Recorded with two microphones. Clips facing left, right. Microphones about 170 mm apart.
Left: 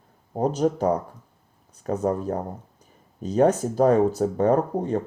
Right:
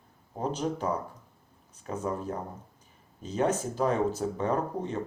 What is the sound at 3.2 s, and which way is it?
Speech, 40° left (ahead or behind).